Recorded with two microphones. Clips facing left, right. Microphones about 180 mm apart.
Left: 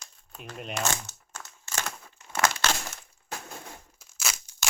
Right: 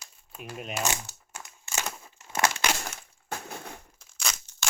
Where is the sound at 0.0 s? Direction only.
5° right (ahead or behind).